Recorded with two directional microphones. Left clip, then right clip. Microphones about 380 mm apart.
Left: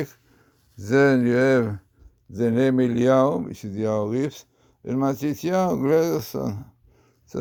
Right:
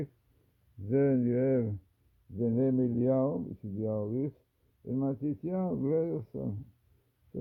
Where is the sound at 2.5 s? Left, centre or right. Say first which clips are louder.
Left 9 dB; centre.